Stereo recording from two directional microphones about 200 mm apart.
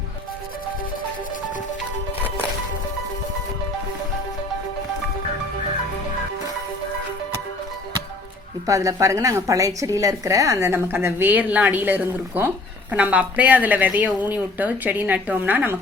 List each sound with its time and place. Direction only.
8.6 s a woman's voice: 15° right (ahead or behind)